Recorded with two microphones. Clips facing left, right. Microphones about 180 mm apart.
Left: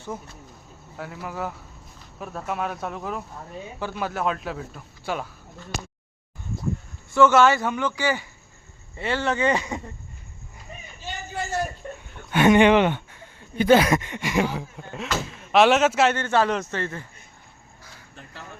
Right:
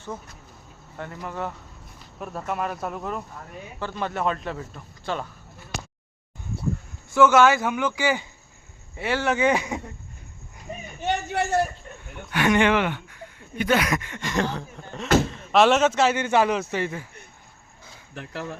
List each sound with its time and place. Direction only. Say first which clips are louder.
0.1 s speech: left 2 dB; 10° left (ahead or behind)
7.1 s speech: even; centre (ahead or behind)
11.0 s a sound: right 7 dB; 75° right (ahead or behind)
12.3 s speech: left 4 dB; 25° left (ahead or behind); by 16.1 s centre (ahead or behind)
16.1 s speech: right 1 dB; 15° right (ahead or behind)
18.1 s speech: right 10 dB; 75° right (ahead or behind)